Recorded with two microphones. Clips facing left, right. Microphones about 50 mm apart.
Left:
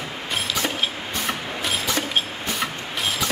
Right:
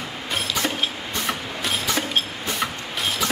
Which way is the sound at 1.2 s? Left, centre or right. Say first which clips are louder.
Even; centre.